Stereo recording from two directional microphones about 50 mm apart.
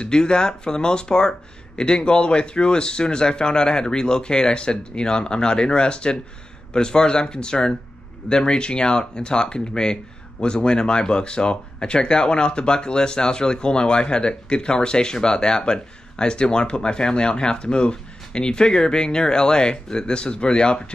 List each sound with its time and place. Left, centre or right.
0.0 s speech: centre